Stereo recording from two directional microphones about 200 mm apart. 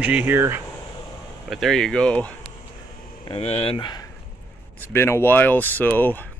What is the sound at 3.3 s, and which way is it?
Speech, 25° left (ahead or behind).